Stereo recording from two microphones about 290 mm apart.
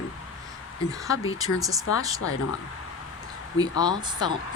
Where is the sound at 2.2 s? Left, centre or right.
Left.